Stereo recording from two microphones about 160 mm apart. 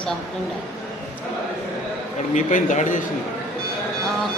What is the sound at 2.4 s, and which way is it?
Speech, 50° left (ahead or behind).